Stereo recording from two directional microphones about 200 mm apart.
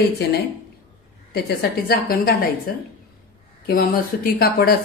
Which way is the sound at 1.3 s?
50° left (ahead or behind).